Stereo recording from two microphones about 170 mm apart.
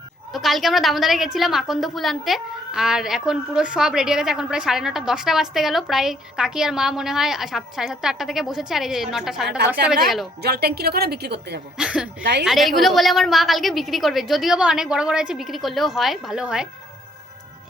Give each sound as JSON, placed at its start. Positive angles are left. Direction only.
{"t": 0.3, "sound": "a woman's voice", "side_deg": 0}
{"t": 10.4, "sound": "a woman's voice", "side_deg": -70}
{"t": 11.8, "sound": "a woman's voice", "side_deg": -5}
{"t": 12.2, "sound": "a woman's voice", "side_deg": -80}
{"t": 12.5, "sound": "a woman's voice", "side_deg": 0}